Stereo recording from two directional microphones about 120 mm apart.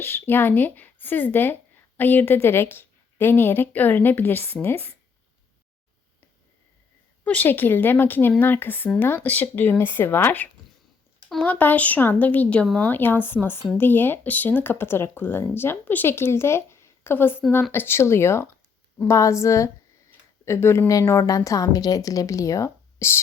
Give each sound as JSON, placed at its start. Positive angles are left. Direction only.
{"t": 0.0, "sound": "speech", "side_deg": 20}
{"t": 7.3, "sound": "speech", "side_deg": 15}